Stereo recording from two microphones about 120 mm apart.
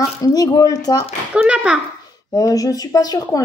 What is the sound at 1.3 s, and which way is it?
Speech, 5° right (ahead or behind).